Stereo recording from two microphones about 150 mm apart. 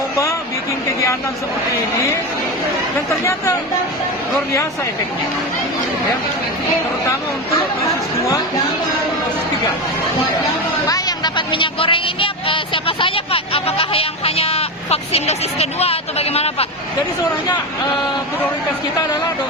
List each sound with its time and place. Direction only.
3.1 s speech: 20° left (ahead or behind)
10.8 s speech: 25° left (ahead or behind); by 16.6 s 45° left (ahead or behind)